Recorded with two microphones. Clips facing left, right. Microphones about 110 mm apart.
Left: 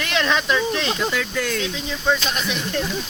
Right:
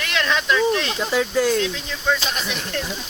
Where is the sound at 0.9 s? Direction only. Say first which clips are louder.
Right 3 dB; 25° right (ahead or behind).